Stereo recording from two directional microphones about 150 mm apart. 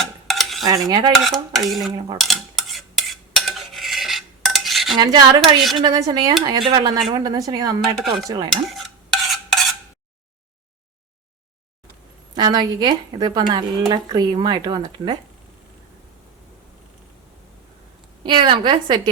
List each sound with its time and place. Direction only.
0.0 s cutlery: centre (ahead or behind)
0.6 s a woman's voice: 25° right (ahead or behind)
1.1 s dishes: centre (ahead or behind)
2.1 s stir: centre (ahead or behind)
4.9 s a woman's voice: 25° right (ahead or behind)
8.4 s stir: centre (ahead or behind)
12.3 s a woman's voice: 30° right (ahead or behind)
18.2 s a woman's voice: 30° right (ahead or behind)